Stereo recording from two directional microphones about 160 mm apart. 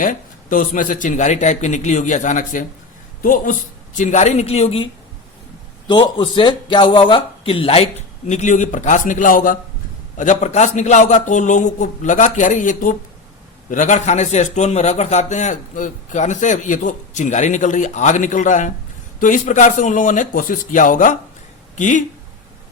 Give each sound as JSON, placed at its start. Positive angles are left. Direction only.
{"t": 0.0, "sound": "a man's voice", "side_deg": 55}
{"t": 5.9, "sound": "speech", "side_deg": 30}
{"t": 8.3, "sound": "a man's voice", "side_deg": 50}